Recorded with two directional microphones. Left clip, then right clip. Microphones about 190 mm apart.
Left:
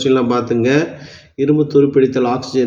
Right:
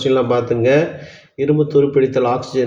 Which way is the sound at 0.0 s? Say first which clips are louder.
Even; 25° left (ahead or behind).